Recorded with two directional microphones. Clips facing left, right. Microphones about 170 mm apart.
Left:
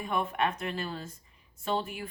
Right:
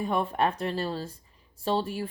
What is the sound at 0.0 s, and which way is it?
Speech, 35° right (ahead or behind).